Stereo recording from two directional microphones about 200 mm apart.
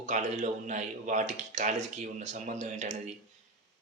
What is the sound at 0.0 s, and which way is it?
Speech, 35° right (ahead or behind).